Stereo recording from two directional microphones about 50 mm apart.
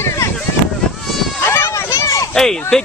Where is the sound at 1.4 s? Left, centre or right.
Left.